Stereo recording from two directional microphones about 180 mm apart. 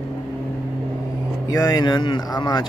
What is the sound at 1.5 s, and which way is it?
Speech, 20° left (ahead or behind).